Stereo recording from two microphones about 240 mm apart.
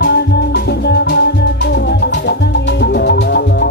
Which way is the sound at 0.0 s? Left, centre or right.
Left.